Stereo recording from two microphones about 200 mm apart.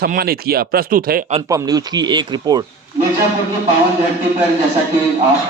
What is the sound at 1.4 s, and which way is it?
Speech, 20° right (ahead or behind).